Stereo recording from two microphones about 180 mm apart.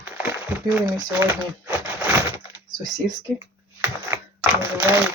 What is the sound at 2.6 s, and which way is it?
Typing, 20° right (ahead or behind).